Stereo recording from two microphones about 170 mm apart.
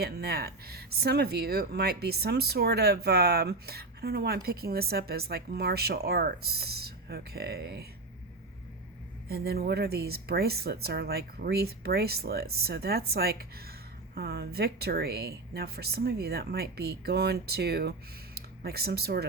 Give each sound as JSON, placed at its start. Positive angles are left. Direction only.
{"t": 0.0, "sound": "speech", "side_deg": -65}
{"t": 9.3, "sound": "speech", "side_deg": -65}